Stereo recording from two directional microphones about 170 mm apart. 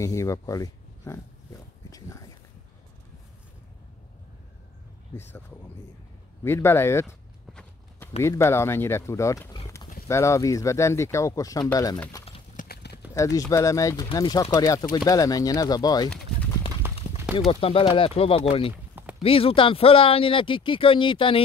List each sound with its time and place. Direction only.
0.0 s speech: 20° left (ahead or behind)
6.4 s speech: 15° left (ahead or behind)
8.2 s speech: 15° left (ahead or behind)
12.5 s clip-clop: 70° left (ahead or behind)
13.1 s speech: 20° left (ahead or behind)
16.8 s clip-clop: 15° right (ahead or behind)
17.5 s speech: 35° left (ahead or behind)
18.9 s clip-clop: 10° right (ahead or behind)
19.2 s speech: 35° left (ahead or behind)